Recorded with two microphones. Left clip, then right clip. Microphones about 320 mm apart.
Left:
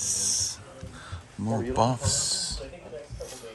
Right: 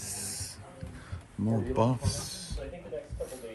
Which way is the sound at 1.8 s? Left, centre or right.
Centre.